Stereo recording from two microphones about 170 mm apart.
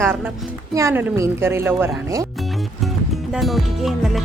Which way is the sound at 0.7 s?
15° right (ahead or behind).